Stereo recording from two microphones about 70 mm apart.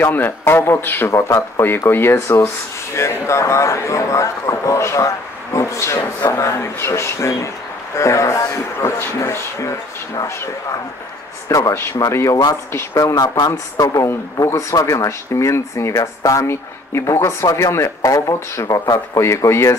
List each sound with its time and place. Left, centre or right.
0.0 s speech: left
11.4 s speech: left